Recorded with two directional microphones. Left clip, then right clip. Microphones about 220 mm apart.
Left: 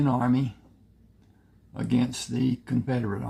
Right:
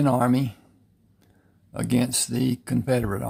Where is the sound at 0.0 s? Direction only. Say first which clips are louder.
Right 4 dB; 45° right (ahead or behind).